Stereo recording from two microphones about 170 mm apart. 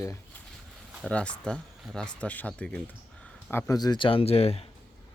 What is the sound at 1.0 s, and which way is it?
Speech, 5° left (ahead or behind).